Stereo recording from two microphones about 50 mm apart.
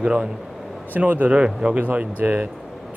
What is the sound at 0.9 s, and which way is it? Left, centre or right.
Speech, right.